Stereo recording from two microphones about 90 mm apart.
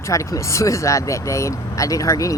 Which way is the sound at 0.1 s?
35° left (ahead or behind).